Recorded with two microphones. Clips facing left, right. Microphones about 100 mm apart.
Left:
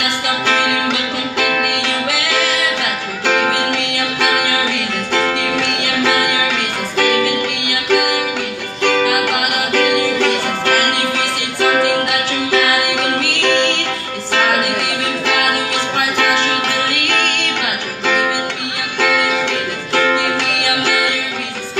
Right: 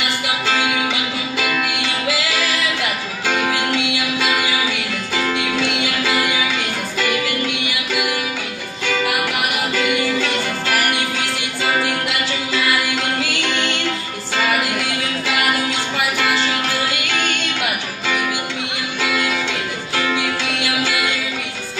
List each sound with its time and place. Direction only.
0.5 s music: 65° left (ahead or behind)
7.6 s music: 70° left (ahead or behind)
12.4 s music: 75° left (ahead or behind)
18.9 s music: 80° left